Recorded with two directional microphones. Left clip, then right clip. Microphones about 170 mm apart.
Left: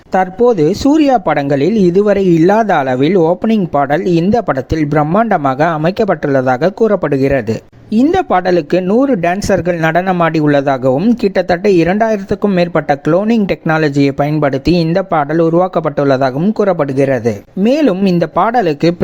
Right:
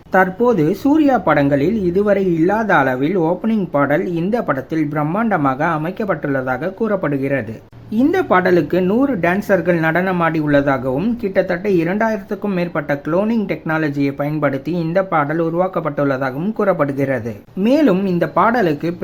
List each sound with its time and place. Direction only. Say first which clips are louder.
0.2 s a man's voice: left 4 dB; 40° left (ahead or behind)